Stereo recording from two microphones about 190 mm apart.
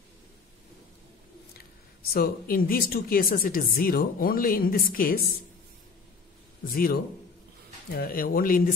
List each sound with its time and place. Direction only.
2.1 s speech: 50° left (ahead or behind)
6.7 s speech: 50° left (ahead or behind)